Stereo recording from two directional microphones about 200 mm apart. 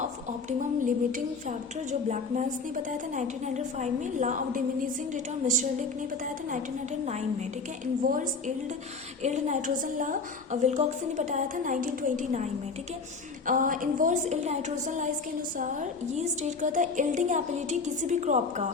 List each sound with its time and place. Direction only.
1.5 s a woman's voice: 35° right (ahead or behind)
7.0 s a woman's voice: 35° right (ahead or behind)
13.5 s a woman's voice: 40° right (ahead or behind)